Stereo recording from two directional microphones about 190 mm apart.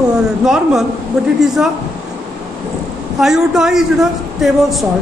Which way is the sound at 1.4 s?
Centre (ahead or behind).